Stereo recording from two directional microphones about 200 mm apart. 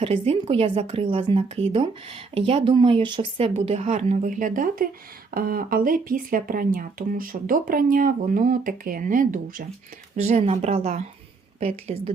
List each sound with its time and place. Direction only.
0.0 s speech: 30° right (ahead or behind)